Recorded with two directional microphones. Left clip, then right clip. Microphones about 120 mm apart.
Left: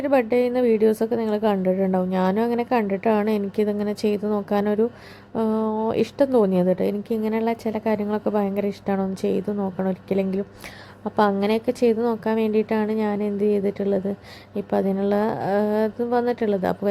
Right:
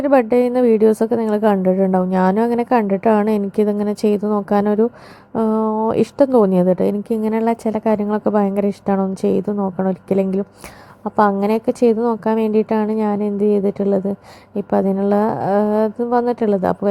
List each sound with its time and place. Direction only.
0.0 s a woman's voice: 35° right (ahead or behind)